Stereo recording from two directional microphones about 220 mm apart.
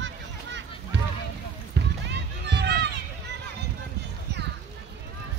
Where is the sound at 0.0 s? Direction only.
55° right (ahead or behind).